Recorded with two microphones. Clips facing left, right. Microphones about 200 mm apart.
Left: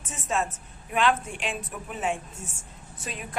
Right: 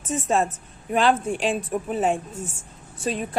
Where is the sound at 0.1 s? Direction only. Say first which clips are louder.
Right 7 dB; 35° right (ahead or behind).